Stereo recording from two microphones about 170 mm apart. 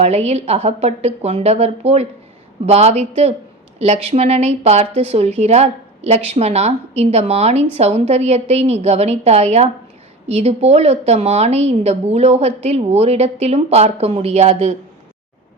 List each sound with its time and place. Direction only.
0.0 s a woman's voice: 40° right (ahead or behind)